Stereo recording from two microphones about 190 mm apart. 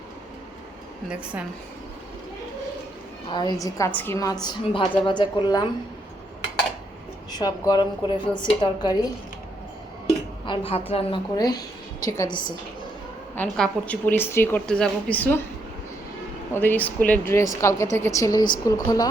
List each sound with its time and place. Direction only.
3.3 s a woman's voice: 20° left (ahead or behind)
7.3 s a woman's voice: 20° left (ahead or behind)
10.4 s a woman's voice: 25° left (ahead or behind)
13.3 s a woman's voice: 10° left (ahead or behind)
16.6 s a woman's voice: 10° left (ahead or behind)